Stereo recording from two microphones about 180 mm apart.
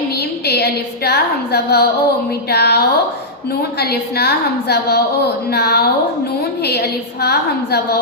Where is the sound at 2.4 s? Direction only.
65° left (ahead or behind).